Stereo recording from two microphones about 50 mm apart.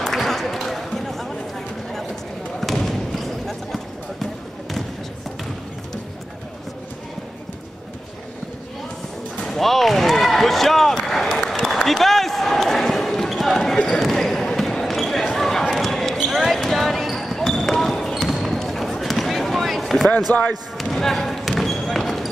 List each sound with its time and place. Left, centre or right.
0.0 s a sound: centre
2.6 s basketball bounce: centre
9.5 s basketball bounce: centre
20.3 s speech: left
20.7 s basketball bounce: centre